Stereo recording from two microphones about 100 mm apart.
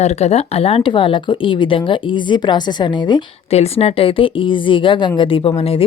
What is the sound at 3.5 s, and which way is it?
Speech, 85° left.